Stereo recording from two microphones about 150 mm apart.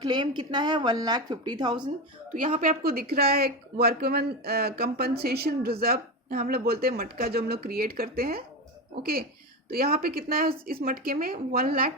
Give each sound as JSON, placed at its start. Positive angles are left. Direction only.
{"t": 0.0, "sound": "a woman's voice", "side_deg": -30}
{"t": 2.3, "sound": "speech", "side_deg": -65}
{"t": 9.6, "sound": "a woman's voice", "side_deg": -85}